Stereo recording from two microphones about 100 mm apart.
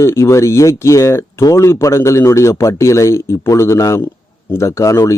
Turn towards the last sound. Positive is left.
turn(degrees=35)  # may be behind; listen again after turning